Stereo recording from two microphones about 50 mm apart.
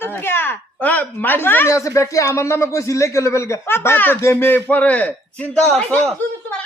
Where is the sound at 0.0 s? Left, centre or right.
Left.